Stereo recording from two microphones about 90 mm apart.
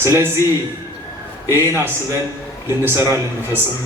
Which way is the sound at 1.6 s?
25° right (ahead or behind).